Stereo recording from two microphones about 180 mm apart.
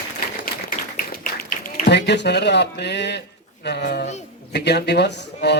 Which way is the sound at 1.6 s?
45° left (ahead or behind).